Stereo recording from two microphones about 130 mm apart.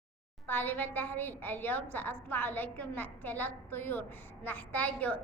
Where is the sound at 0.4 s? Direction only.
15° left (ahead or behind).